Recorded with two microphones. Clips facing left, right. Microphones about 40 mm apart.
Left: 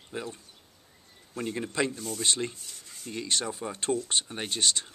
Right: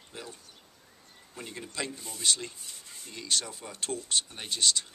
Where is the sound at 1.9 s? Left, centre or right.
Centre.